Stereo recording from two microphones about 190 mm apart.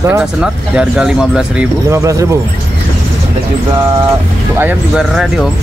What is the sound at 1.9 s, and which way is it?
Speech, 15° right (ahead or behind).